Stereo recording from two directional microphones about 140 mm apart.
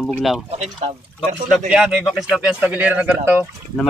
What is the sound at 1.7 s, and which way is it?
Speech, 5° right (ahead or behind).